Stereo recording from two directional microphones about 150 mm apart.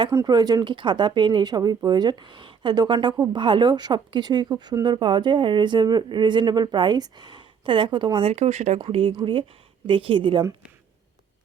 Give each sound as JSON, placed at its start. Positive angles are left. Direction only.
{"t": 0.1, "sound": "speech", "side_deg": -25}
{"t": 8.8, "sound": "speech", "side_deg": -35}